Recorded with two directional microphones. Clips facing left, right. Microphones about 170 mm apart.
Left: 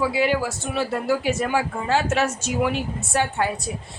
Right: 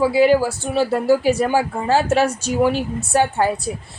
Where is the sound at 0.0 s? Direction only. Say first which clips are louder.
Right 7 dB; 35° right (ahead or behind).